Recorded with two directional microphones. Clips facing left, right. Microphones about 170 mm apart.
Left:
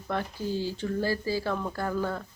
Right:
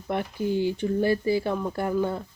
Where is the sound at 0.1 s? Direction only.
20° right (ahead or behind).